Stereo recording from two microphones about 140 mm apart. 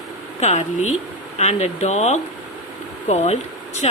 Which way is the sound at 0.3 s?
55° left (ahead or behind).